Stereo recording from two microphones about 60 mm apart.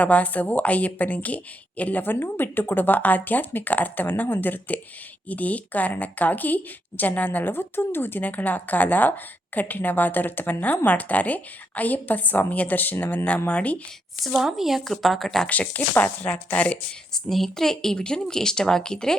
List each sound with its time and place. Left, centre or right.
0.0 s a woman's voice: left
13.5 s a woman's voice: left
14.3 s speech: centre
15.7 s a woman's voice: left
17.2 s speech: centre